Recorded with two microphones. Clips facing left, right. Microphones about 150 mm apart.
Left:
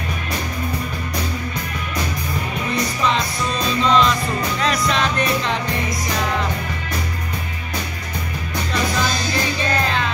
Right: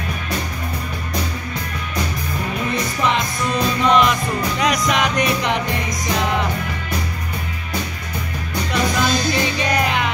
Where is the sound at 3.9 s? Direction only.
15° right (ahead or behind).